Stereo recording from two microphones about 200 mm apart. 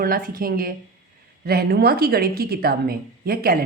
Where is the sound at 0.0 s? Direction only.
45° right (ahead or behind).